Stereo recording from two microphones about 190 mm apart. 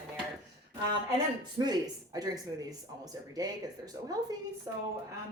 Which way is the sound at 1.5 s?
20° right (ahead or behind).